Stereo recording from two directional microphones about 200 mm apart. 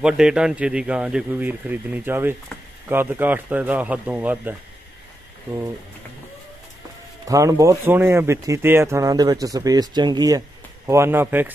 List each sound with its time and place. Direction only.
0.0 s speech: 5° right (ahead or behind)
7.2 s speech: 15° right (ahead or behind)